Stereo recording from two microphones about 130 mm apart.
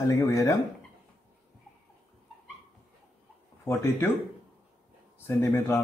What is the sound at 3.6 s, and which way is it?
Speech, 20° left (ahead or behind).